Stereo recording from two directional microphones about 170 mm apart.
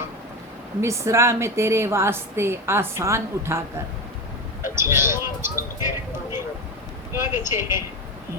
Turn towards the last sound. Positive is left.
turn(degrees=-15)  # may be behind; listen again after turning